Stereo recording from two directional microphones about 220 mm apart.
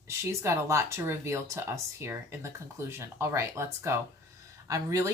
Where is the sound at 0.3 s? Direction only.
15° right (ahead or behind).